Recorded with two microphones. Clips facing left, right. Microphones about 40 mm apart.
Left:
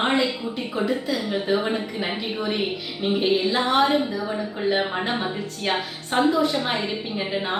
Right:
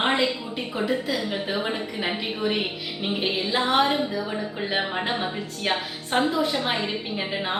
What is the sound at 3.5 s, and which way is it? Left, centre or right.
Speech, centre.